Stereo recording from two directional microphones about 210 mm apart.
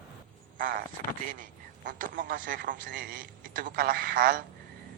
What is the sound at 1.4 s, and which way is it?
A man's voice, 40° right (ahead or behind).